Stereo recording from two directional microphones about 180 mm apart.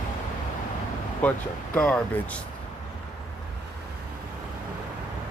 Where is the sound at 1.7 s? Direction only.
5° left (ahead or behind).